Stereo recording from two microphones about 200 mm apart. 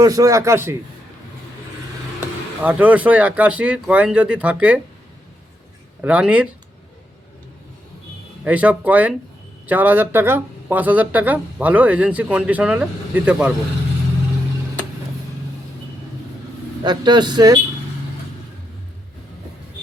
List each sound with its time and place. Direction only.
0.0 s speech: 15° right (ahead or behind)
2.6 s speech: 10° right (ahead or behind)
6.0 s speech: 5° right (ahead or behind)
8.4 s speech: 5° right (ahead or behind)
16.8 s a man's voice: 20° right (ahead or behind)